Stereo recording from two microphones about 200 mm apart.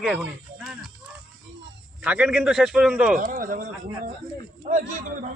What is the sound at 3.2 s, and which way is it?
Speech, 45° right (ahead or behind).